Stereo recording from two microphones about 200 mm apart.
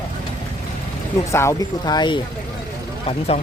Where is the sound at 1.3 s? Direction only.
15° left (ahead or behind).